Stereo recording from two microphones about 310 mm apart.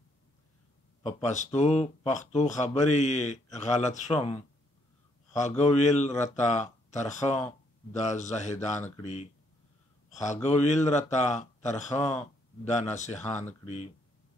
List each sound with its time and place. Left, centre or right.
1.0 s speech: left
5.6 s speech: left